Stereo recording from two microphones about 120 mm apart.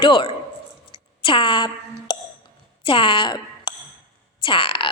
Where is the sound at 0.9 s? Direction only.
45° left (ahead or behind).